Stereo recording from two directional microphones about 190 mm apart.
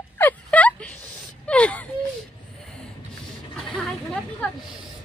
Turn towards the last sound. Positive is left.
turn(degrees=5)  # may be behind; listen again after turning